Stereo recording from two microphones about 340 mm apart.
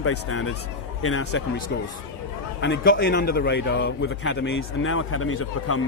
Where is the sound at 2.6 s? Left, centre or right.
Left.